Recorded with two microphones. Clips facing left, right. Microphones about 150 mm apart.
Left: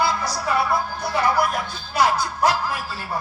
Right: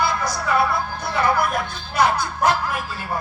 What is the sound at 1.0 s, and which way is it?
Music, 55° right (ahead or behind).